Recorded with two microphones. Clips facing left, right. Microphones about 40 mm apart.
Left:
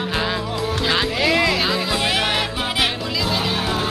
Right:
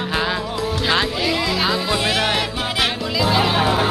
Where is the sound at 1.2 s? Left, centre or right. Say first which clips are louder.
Left 3 dB; left.